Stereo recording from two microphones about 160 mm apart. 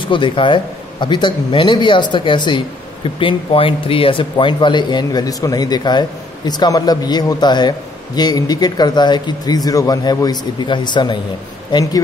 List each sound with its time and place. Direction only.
0.0 s speech: 30° left (ahead or behind)